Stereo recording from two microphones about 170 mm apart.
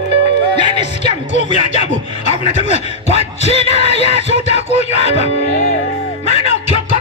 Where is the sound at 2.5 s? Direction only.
40° left (ahead or behind).